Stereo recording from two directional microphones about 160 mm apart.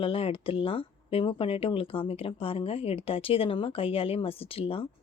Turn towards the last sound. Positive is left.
turn(degrees=35)  # may be behind; listen again after turning